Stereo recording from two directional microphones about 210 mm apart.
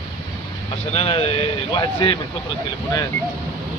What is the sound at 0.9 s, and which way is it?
Speech, 30° left (ahead or behind).